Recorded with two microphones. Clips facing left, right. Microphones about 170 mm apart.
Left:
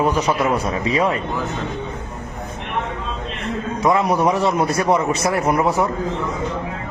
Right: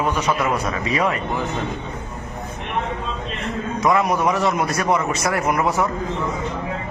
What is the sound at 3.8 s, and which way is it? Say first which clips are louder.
A man's voice: left 1 dB; 30° left (ahead or behind).